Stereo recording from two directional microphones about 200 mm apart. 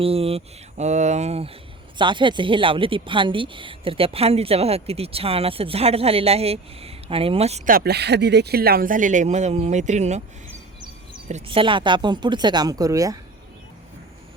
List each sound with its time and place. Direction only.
0.0 s speech: 30° right (ahead or behind)
11.3 s speech: 30° right (ahead or behind)